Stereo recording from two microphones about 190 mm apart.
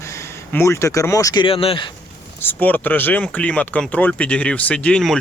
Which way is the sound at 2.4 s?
10° left (ahead or behind).